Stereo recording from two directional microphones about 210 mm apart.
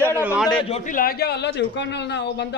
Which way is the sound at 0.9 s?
45° left (ahead or behind).